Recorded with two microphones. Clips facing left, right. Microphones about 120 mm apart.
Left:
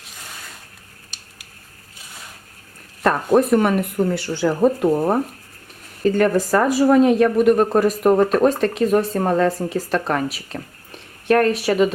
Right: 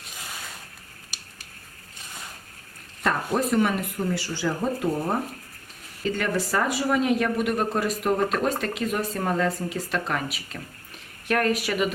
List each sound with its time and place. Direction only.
0.0 s a sound: centre (ahead or behind)
3.0 s speech: 50° left (ahead or behind)
6.0 s a woman's voice: 45° left (ahead or behind)